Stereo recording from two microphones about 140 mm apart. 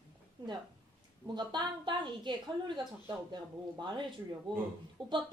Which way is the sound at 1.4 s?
35° right (ahead or behind).